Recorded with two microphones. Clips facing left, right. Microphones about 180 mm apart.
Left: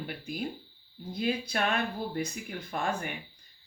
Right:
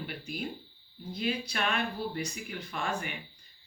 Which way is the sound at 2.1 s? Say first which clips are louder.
Left 2 dB; 45° left (ahead or behind).